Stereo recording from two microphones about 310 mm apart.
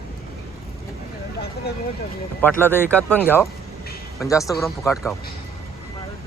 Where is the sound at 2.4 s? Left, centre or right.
Centre.